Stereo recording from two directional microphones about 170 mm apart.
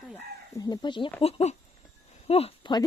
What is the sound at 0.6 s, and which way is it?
Speech, 25° left (ahead or behind).